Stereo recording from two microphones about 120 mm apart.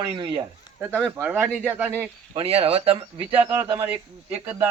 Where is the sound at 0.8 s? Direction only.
15° right (ahead or behind).